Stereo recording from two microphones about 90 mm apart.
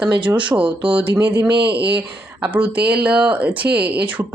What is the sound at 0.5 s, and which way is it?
Speech, 25° right (ahead or behind).